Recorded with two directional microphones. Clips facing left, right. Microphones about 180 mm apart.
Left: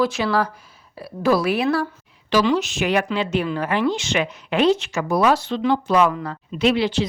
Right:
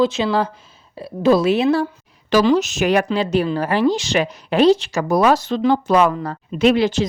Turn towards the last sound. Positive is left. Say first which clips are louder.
# right 4 dB
turn(degrees=-45)  # may be behind; listen again after turning